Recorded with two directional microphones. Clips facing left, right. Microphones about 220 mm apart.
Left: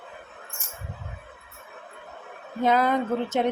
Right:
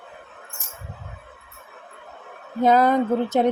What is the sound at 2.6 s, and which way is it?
Speech, 40° right (ahead or behind).